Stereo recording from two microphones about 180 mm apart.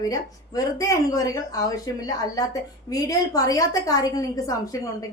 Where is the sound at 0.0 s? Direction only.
20° left (ahead or behind).